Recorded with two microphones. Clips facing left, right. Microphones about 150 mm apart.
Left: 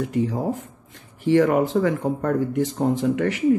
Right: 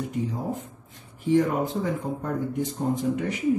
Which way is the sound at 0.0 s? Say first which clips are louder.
Left 6 dB; 90° left.